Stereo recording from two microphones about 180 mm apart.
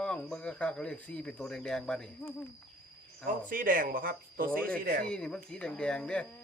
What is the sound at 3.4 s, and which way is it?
Speech, 50° right (ahead or behind).